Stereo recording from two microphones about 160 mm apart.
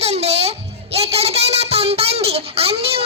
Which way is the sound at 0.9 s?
40° right (ahead or behind).